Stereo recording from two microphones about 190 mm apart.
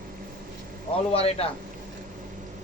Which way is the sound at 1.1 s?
30° left (ahead or behind).